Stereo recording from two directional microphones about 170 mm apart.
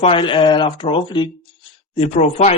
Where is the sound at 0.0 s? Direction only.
30° left (ahead or behind).